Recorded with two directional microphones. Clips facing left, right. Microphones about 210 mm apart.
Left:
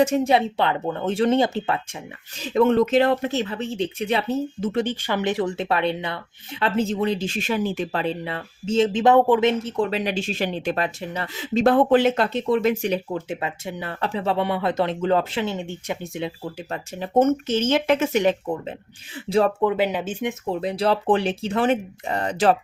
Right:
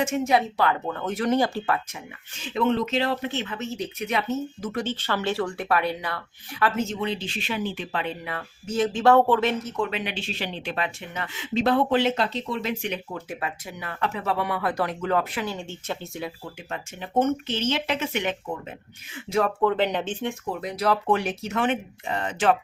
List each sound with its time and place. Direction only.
0.0 s speech: 35° left (ahead or behind)
2.4 s speech: 45° left (ahead or behind); by 4.9 s 25° left (ahead or behind)
4.9 s speech: 15° left (ahead or behind); by 12.9 s 50° left (ahead or behind)
13.1 s speech: 25° left (ahead or behind)
16.7 s speech: 40° left (ahead or behind)
19.6 s speech: 10° left (ahead or behind)
20.5 s speech: 30° left (ahead or behind)